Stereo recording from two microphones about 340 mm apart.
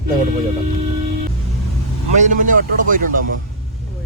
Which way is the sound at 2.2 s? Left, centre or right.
Right.